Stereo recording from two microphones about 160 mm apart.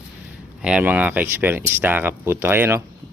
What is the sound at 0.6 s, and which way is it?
Speech, 5° right (ahead or behind).